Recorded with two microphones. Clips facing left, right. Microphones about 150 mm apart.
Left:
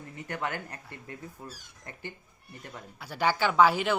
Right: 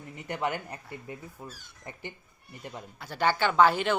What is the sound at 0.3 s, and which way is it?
Speech, 15° right (ahead or behind).